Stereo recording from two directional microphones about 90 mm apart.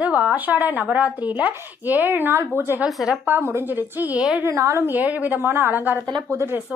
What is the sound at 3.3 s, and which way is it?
Speech, 25° right (ahead or behind).